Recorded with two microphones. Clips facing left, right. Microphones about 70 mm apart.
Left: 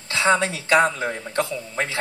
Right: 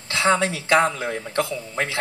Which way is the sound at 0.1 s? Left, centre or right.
Right.